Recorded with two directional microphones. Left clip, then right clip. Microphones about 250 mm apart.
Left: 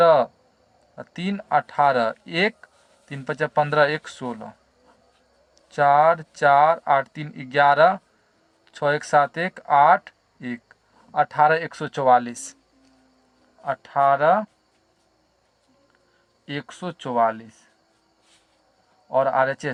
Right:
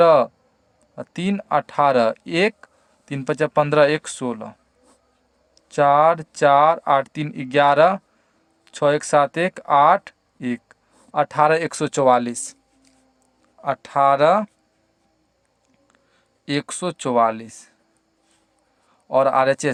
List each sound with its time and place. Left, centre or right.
0.0 s speech: right
5.7 s speech: right
13.6 s speech: right
16.5 s speech: right
19.0 s speech: right